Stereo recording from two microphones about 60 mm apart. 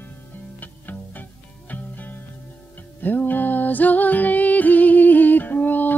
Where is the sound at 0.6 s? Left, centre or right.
Left.